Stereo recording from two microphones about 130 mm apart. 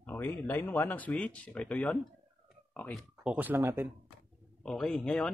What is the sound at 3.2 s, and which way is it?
Speech, 15° right (ahead or behind).